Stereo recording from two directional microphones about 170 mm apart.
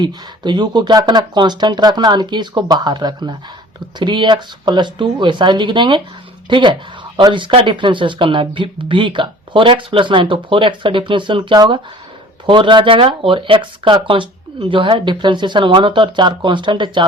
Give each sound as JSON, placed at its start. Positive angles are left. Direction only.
{"t": 0.0, "sound": "speech", "side_deg": -25}